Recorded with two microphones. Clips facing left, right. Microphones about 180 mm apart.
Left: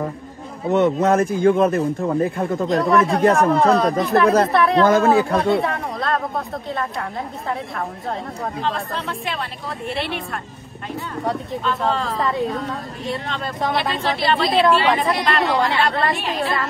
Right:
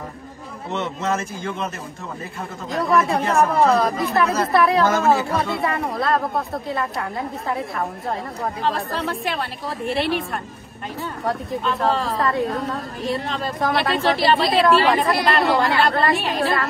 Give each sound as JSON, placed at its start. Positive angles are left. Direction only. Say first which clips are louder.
{"t": 0.7, "sound": "a man's voice", "louder": "left 8 dB", "side_deg": 50}
{"t": 2.7, "sound": "a woman's voice", "louder": "left 1 dB", "side_deg": 0}
{"t": 11.2, "sound": "a woman's voice", "louder": "even", "side_deg": 0}